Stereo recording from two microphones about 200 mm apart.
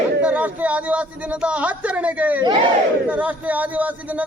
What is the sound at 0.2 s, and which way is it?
Speech, 5° right (ahead or behind).